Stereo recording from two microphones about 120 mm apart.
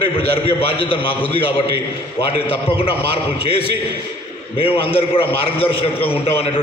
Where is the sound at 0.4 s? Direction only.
50° left (ahead or behind).